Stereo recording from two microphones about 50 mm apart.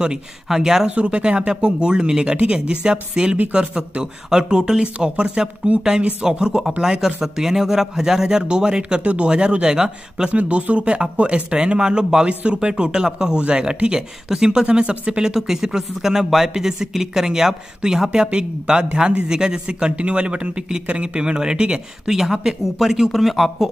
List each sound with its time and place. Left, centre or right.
0.6 s speech: centre
10.3 s speech: right; by 23.7 s centre